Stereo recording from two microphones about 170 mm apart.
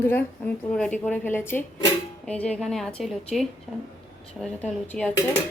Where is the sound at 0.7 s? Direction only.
5° left (ahead or behind).